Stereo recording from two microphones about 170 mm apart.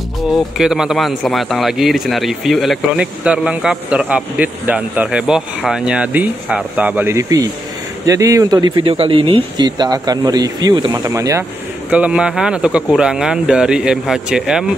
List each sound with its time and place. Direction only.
0.6 s a man's voice: 5° right (ahead or behind)
11.9 s a man's voice: 5° right (ahead or behind)